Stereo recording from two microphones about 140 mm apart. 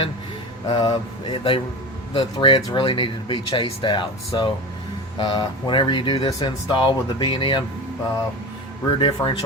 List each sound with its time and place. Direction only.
0.7 s speech: 35° left (ahead or behind)
9.0 s speech: 40° left (ahead or behind)